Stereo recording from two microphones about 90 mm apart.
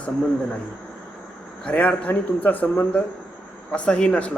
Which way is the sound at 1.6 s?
15° left (ahead or behind).